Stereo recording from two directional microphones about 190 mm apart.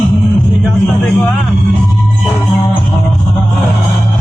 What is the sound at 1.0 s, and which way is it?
Speech, 5° left (ahead or behind).